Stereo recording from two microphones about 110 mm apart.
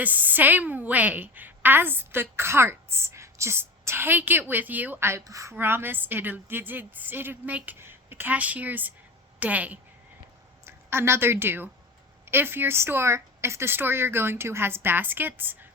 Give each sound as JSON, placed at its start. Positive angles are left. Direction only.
{"t": 0.0, "sound": "a woman's voice", "side_deg": -15}